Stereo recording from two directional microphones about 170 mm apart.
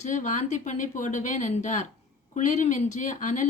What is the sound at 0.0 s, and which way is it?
Speech, 45° left (ahead or behind).